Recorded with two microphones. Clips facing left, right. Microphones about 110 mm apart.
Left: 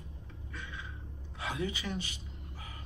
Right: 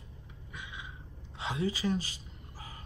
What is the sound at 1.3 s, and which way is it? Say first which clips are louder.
Gasp: right 3 dB; 25° right (ahead or behind).